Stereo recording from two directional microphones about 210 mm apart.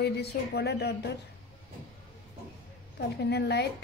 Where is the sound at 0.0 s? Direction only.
50° left (ahead or behind).